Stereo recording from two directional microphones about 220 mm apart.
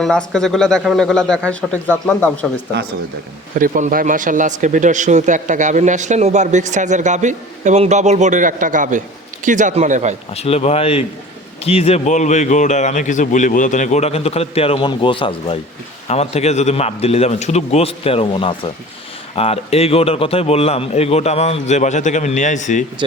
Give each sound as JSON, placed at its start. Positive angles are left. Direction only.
{"t": 0.0, "sound": "a man's voice", "side_deg": 5}
{"t": 3.5, "sound": "speech", "side_deg": -35}
{"t": 10.3, "sound": "a man's voice", "side_deg": 30}